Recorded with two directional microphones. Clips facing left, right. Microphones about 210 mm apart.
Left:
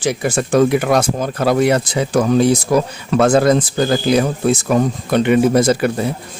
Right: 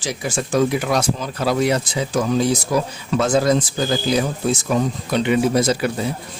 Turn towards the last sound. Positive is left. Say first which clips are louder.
# left 4 dB
turn(degrees=55)  # may be behind; listen again after turning